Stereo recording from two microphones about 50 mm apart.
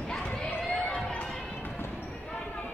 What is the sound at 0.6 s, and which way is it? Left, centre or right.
Run, centre.